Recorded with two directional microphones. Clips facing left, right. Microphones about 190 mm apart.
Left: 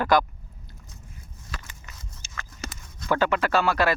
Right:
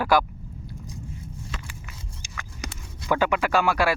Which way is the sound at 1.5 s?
20° right (ahead or behind).